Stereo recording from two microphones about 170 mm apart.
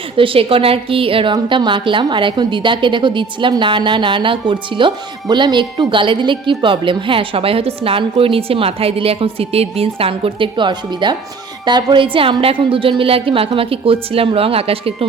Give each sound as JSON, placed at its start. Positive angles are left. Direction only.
{"t": 0.2, "sound": "a woman's voice", "side_deg": -30}